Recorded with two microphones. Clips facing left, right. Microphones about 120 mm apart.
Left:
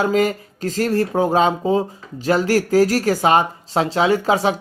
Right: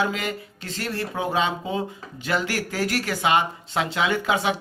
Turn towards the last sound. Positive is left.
turn(degrees=35)  # may be behind; listen again after turning